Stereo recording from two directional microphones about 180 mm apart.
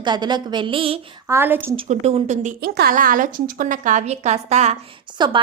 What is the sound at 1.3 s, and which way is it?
Speech, 10° right (ahead or behind).